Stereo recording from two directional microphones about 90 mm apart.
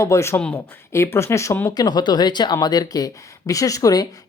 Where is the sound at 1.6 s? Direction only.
45° left (ahead or behind).